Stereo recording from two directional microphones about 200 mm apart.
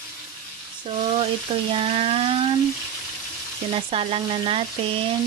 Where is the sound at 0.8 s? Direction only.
30° right (ahead or behind).